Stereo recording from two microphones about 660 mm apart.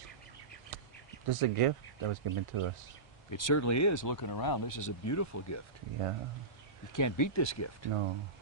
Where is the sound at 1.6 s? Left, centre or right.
Right.